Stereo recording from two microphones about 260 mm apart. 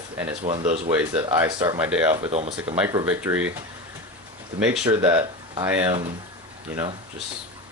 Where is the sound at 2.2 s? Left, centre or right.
Right.